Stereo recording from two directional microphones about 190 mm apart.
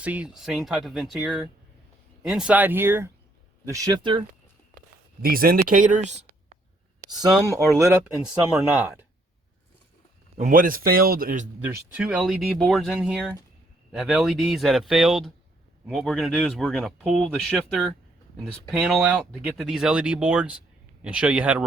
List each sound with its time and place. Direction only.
0.0 s speech: 5° right (ahead or behind); by 4.2 s 20° right (ahead or behind)
5.2 s a man's voice: 50° right (ahead or behind)
7.1 s speech: 20° right (ahead or behind)
10.3 s a man's voice: 45° right (ahead or behind)
11.6 s speech: 5° right (ahead or behind)